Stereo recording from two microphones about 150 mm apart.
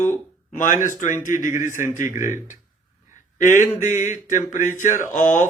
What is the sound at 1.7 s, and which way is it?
Speech, 15° right (ahead or behind).